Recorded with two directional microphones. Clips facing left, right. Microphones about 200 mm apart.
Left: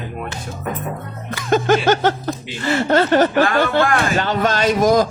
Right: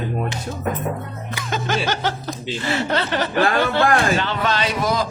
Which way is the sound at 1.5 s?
50° left (ahead or behind).